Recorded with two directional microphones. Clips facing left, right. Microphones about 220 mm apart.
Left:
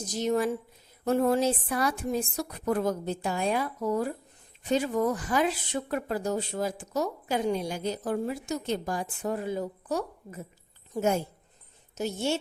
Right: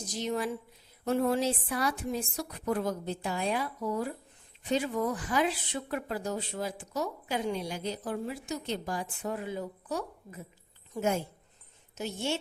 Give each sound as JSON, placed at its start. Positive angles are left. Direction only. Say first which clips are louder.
{"t": 0.1, "sound": "a woman's voice", "louder": "left 6 dB", "side_deg": 45}